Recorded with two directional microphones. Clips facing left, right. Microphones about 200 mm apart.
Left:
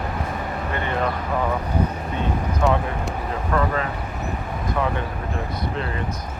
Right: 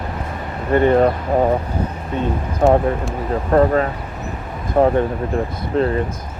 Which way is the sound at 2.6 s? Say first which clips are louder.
Right 8 dB; 45° right (ahead or behind).